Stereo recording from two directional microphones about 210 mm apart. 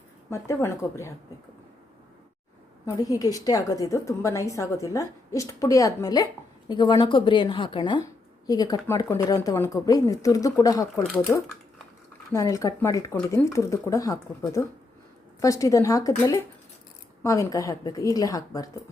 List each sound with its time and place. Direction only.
0.3 s a woman's voice: 15° left (ahead or behind)
2.8 s a woman's voice: 15° left (ahead or behind)